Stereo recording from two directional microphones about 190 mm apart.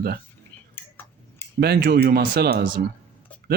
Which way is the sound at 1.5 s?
60° right (ahead or behind).